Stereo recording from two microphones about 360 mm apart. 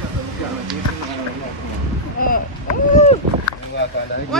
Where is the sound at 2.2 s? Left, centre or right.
Left.